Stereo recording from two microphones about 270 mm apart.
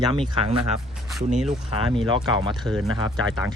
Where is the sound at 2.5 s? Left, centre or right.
Centre.